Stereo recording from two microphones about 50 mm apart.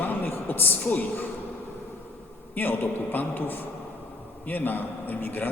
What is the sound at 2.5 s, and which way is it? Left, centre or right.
A man's voice, left.